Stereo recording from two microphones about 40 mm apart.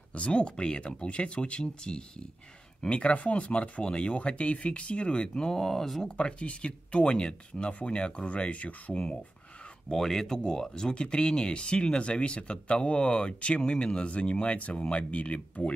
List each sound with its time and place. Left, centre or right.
0.1 s speech: left
2.9 s speech: left
5.5 s speech: centre
6.0 s speech: left
9.8 s speech: centre; by 15.7 s left